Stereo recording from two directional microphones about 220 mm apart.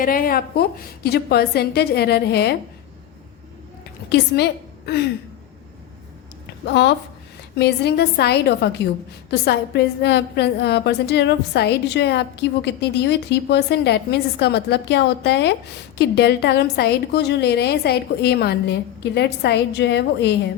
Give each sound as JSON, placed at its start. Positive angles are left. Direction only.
{"t": 0.0, "sound": "a woman's voice", "side_deg": 40}
{"t": 4.1, "sound": "a woman's voice", "side_deg": 50}
{"t": 6.8, "sound": "a woman's voice", "side_deg": 50}